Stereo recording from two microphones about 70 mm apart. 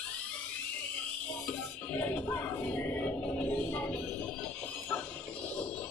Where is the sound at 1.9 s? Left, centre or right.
Left.